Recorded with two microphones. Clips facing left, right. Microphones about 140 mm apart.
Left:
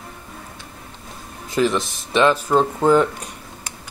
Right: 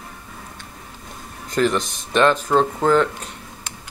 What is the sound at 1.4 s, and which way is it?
Speech, 5° left (ahead or behind).